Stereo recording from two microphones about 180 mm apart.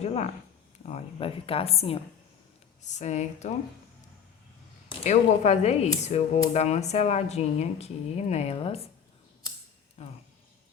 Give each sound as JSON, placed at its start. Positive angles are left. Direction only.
{"t": 0.0, "sound": "speech", "side_deg": 35}
{"t": 4.9, "sound": "speech", "side_deg": 40}
{"t": 10.0, "sound": "speech", "side_deg": 35}